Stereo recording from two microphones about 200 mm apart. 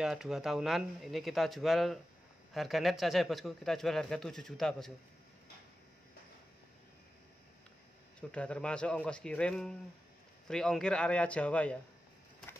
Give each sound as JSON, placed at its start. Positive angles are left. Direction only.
{"t": 0.0, "sound": "a man's voice", "side_deg": 0}
{"t": 8.2, "sound": "a man's voice", "side_deg": 5}